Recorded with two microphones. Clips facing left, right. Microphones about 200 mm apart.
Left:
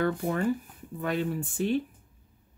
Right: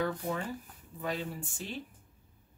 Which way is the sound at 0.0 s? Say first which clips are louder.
Left 6 dB; 60° left (ahead or behind).